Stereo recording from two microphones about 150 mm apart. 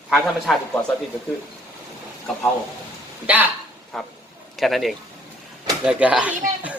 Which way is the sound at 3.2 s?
10° right (ahead or behind).